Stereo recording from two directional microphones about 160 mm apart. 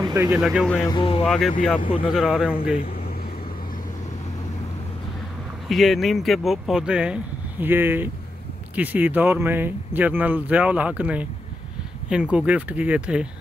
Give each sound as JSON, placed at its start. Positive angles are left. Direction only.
{"t": 0.0, "sound": "vehicle", "side_deg": -20}
{"t": 0.3, "sound": "speech", "side_deg": -5}
{"t": 0.8, "sound": "speech", "side_deg": 30}
{"t": 1.2, "sound": "speech", "side_deg": 0}
{"t": 1.8, "sound": "speech", "side_deg": 30}
{"t": 2.1, "sound": "speech", "side_deg": -5}
{"t": 5.7, "sound": "speech", "side_deg": 0}